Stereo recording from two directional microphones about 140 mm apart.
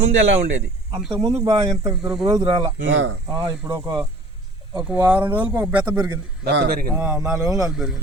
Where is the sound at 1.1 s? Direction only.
35° right (ahead or behind).